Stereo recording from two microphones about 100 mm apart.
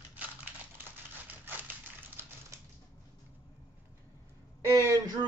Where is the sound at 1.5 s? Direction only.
20° right (ahead or behind).